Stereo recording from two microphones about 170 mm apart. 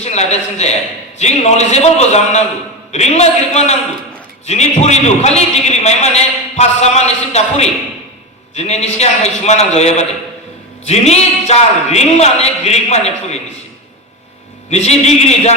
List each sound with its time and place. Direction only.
0.0 s a man's voice: 40° left (ahead or behind)
14.7 s a man's voice: 40° left (ahead or behind)